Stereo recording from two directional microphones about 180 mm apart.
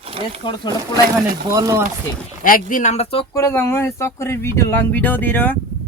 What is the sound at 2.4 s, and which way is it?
Speech, 50° left (ahead or behind).